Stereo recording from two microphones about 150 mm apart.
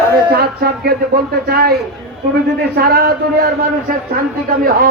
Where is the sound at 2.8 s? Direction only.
90° right.